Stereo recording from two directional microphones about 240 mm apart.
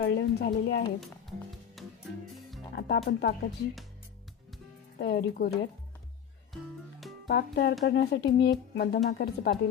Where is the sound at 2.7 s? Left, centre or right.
Left.